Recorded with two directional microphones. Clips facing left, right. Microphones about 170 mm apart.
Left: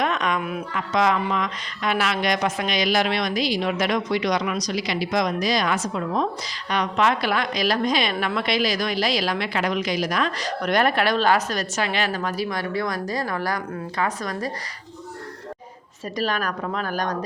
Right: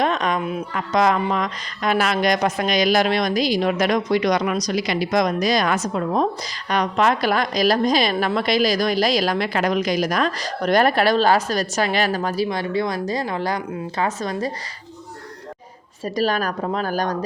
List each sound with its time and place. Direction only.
0.0 s a sound: 35° right (ahead or behind)
0.9 s a woman's voice: 40° right (ahead or behind); by 14.5 s 25° right (ahead or behind)
16.0 s a woman's voice: 35° right (ahead or behind)